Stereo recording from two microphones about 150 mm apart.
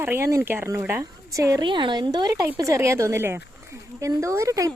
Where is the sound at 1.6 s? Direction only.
30° right (ahead or behind).